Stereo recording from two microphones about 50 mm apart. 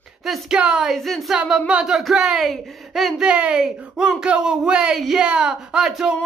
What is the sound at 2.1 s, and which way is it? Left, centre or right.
Speech, centre.